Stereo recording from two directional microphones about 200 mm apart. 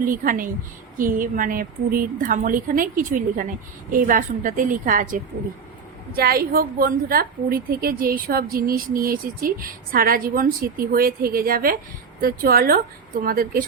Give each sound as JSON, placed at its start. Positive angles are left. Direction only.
{"t": 0.0, "sound": "a woman's voice", "side_deg": -45}